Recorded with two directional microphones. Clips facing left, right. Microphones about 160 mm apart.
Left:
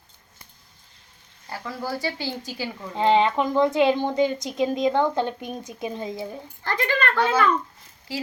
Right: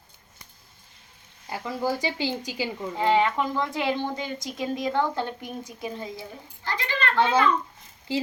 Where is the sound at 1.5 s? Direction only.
20° right (ahead or behind).